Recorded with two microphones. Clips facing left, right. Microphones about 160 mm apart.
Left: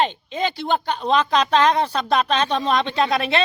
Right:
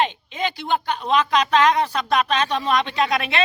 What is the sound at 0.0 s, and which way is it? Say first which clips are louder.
Speech: left 1 dB; 35° left (ahead or behind).